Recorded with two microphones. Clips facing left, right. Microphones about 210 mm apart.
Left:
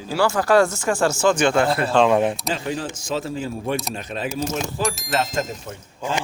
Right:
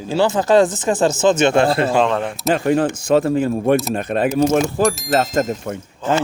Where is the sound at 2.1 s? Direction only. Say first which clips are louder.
Left 3 dB; 15° left (ahead or behind).